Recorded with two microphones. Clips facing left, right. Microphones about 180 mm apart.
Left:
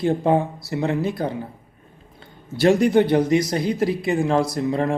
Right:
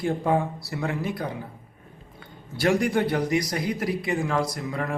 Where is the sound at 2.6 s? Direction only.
25° left (ahead or behind).